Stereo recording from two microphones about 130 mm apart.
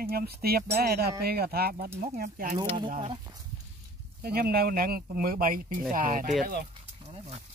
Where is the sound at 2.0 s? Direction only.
90° right.